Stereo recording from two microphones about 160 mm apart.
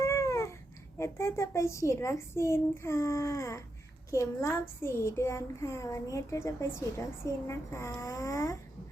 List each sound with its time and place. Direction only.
0.0 s babbling: 20° left (ahead or behind)
0.9 s speech: 20° left (ahead or behind)